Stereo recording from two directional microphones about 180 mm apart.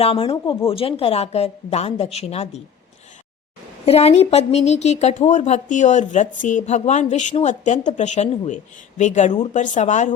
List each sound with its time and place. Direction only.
0.0 s a woman's voice: 30° left (ahead or behind)
3.8 s a woman's voice: 35° left (ahead or behind)